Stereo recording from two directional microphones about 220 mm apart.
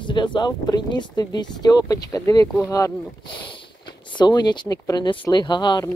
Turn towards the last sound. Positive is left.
turn(degrees=20)  # may be behind; listen again after turning